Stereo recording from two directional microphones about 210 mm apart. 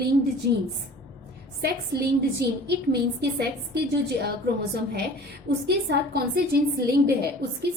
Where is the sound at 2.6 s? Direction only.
50° right (ahead or behind).